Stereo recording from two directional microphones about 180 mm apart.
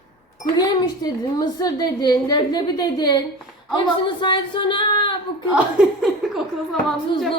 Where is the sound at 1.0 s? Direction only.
20° left (ahead or behind).